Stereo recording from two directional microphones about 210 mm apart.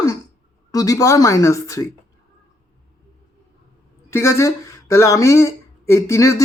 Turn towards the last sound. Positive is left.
turn(degrees=15)  # may be behind; listen again after turning